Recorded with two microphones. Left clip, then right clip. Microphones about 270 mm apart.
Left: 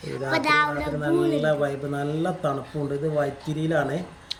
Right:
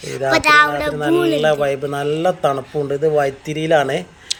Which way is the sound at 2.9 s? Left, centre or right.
Centre.